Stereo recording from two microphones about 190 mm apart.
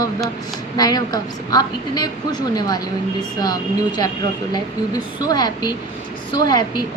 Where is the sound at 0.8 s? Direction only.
20° left (ahead or behind).